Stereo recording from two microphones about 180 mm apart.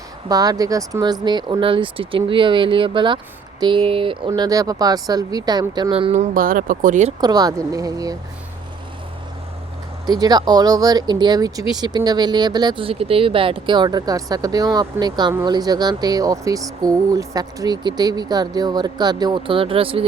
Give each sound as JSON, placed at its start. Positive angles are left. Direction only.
{"t": 0.3, "sound": "speech", "side_deg": -20}
{"t": 6.3, "sound": "speech", "side_deg": -50}
{"t": 7.2, "sound": "speech", "side_deg": -20}
{"t": 10.1, "sound": "speech", "side_deg": -20}